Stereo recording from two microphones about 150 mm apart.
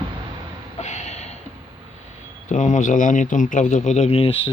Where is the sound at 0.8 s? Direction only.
45° left (ahead or behind).